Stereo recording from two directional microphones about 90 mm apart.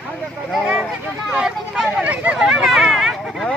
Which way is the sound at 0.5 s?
5° right (ahead or behind).